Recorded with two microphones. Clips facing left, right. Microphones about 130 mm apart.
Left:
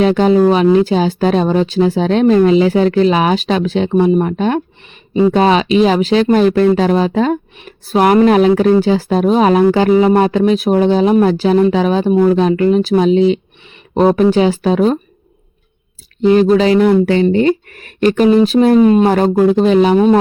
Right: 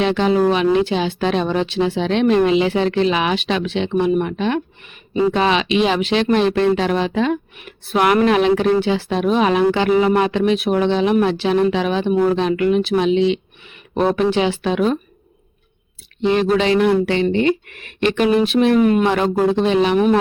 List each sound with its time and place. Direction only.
0.0 s speech: 40° left (ahead or behind)
16.2 s speech: 40° left (ahead or behind)
19.0 s speech: 40° left (ahead or behind)